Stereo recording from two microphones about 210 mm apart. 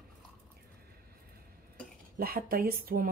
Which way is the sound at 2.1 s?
45° right (ahead or behind).